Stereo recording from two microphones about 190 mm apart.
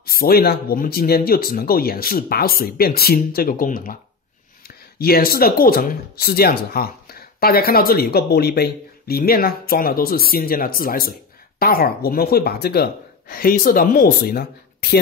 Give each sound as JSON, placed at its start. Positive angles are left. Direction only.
{"t": 0.0, "sound": "speech", "side_deg": 55}